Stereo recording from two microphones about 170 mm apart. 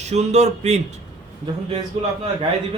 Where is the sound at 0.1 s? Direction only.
40° right (ahead or behind).